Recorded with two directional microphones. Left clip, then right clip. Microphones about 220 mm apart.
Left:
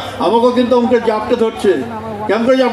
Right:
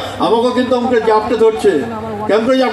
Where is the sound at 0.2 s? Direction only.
30° left (ahead or behind).